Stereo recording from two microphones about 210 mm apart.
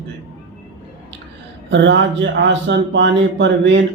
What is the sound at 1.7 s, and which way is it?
Speech, 55° right (ahead or behind).